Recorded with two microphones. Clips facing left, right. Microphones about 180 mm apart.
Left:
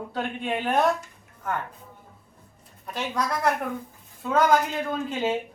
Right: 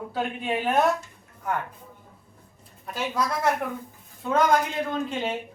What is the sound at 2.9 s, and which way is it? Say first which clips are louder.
Speech: right 1 dB; 5° right (ahead or behind).